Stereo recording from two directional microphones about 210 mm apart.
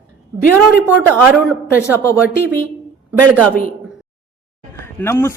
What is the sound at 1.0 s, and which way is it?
Speech, 5° right (ahead or behind).